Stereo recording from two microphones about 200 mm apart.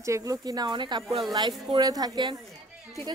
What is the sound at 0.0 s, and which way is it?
A woman's voice, 15° right (ahead or behind).